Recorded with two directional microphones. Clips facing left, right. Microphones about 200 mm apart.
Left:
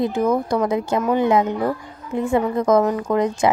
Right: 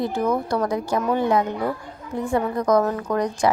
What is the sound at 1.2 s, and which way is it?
A woman's voice, 20° left (ahead or behind).